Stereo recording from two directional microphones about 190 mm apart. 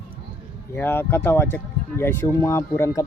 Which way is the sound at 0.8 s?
10° left (ahead or behind).